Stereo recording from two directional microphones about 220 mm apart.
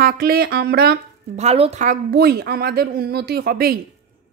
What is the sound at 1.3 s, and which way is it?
A woman's voice, 25° right (ahead or behind).